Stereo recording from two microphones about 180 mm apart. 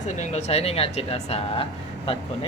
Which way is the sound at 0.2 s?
40° left (ahead or behind).